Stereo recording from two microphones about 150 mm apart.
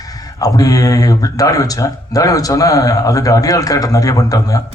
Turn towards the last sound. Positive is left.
turn(degrees=25)  # may be behind; listen again after turning